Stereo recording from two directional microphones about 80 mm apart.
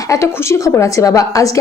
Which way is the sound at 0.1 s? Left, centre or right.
Left.